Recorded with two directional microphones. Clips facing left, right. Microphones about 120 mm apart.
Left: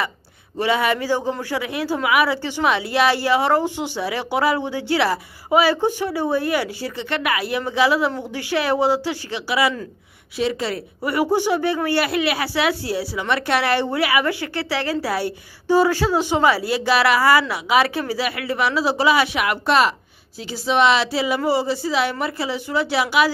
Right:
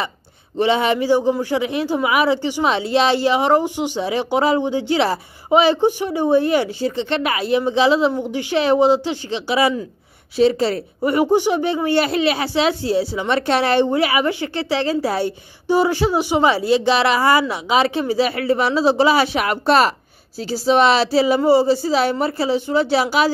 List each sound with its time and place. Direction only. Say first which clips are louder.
0.6 s speech: right 3 dB; 25° right (ahead or behind)
11.1 s speech: right 3 dB; 20° right (ahead or behind)